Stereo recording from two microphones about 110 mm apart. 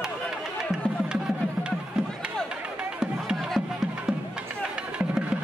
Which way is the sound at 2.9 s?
5° right (ahead or behind).